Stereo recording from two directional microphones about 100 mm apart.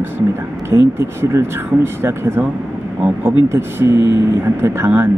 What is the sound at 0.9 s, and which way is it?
Speech, 25° right (ahead or behind).